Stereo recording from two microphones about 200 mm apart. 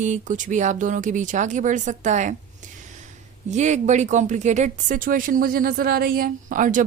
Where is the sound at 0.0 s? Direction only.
40° right (ahead or behind).